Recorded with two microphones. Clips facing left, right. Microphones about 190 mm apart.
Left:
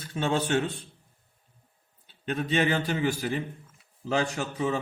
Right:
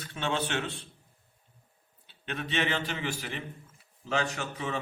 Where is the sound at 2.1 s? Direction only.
40° left (ahead or behind).